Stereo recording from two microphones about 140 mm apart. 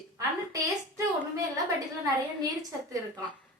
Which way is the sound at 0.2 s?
25° right (ahead or behind).